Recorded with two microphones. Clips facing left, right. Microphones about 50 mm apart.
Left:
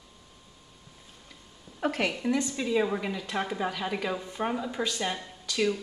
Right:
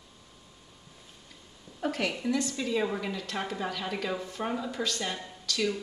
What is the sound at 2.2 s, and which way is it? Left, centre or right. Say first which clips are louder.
A woman's voice: left 2 dB; left.